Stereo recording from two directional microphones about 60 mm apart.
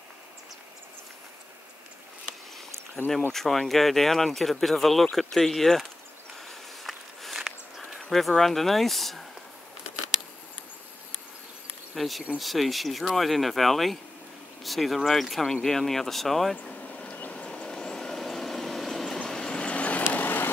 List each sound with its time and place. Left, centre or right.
3.1 s speech: centre
6.3 s a sound: centre
8.0 s speech: centre
11.9 s speech: centre
16.6 s vehicle: left